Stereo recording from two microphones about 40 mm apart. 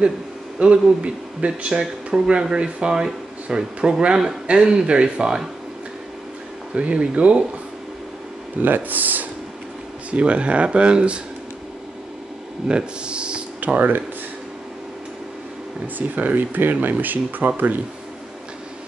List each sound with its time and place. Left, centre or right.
0.6 s speech: right
1.8 s speech: centre
6.7 s speech: right
8.5 s speech: right
10.1 s speech: right
12.6 s speech: right
13.7 s speech: right
16.0 s speech: right
16.3 s speech: right